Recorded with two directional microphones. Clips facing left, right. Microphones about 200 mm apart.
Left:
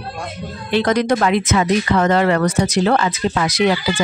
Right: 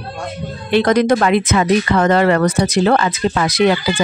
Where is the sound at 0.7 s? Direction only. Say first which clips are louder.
Right 3 dB; 55° right (ahead or behind).